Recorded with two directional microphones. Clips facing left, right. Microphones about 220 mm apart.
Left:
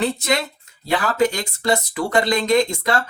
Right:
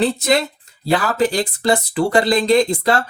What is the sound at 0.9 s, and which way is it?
Speech, 35° right (ahead or behind).